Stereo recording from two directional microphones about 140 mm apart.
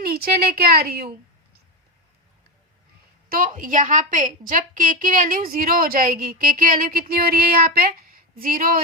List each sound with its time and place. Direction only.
0.0 s a woman's voice: 90° right
3.2 s a woman's voice: 80° right